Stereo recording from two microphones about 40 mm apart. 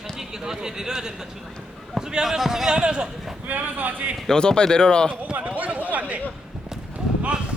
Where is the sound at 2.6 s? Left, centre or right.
Right.